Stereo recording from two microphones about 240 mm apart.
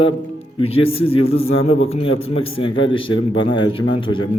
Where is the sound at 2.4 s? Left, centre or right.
Left.